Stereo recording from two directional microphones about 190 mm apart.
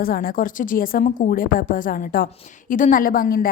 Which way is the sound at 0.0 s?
50° left (ahead or behind).